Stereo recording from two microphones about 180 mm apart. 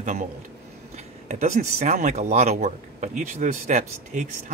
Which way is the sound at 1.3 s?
40° right (ahead or behind).